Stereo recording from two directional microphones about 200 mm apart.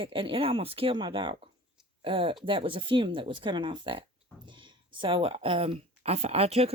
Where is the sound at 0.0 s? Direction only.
25° right (ahead or behind).